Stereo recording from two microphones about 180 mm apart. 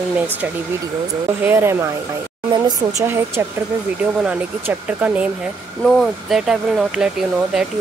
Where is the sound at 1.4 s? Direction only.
10° right (ahead or behind).